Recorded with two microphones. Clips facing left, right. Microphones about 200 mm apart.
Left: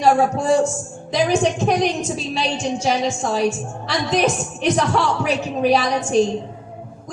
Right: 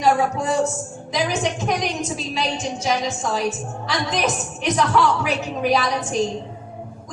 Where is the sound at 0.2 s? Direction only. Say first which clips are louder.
Left 4 dB; 30° left (ahead or behind).